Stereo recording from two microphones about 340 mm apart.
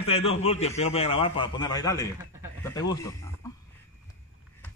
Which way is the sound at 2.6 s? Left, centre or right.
Centre.